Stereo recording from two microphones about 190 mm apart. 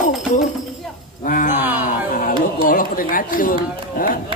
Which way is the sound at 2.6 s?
45° left (ahead or behind).